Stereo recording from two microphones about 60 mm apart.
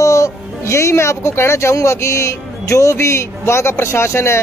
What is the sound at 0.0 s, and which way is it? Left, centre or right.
Speech, left.